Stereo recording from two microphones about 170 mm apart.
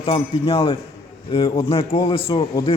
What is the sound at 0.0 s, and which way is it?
Speech, 35° left (ahead or behind).